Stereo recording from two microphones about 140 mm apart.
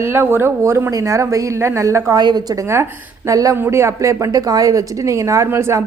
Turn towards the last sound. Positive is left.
turn(degrees=-20)  # may be behind; listen again after turning